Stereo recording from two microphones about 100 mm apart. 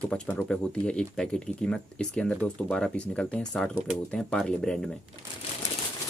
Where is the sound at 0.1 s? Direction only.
10° left (ahead or behind).